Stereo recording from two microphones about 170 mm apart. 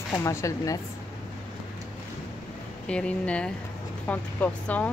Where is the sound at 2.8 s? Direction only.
5° left (ahead or behind).